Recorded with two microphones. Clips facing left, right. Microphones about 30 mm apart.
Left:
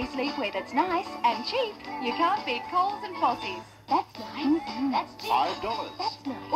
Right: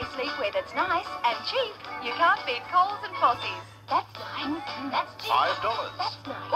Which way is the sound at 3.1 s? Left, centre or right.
Right.